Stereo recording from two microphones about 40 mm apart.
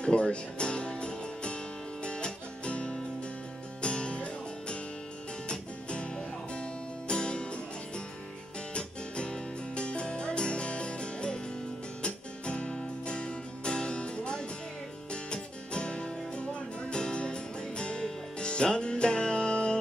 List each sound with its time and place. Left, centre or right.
0.0 s music: left
8.7 s music: left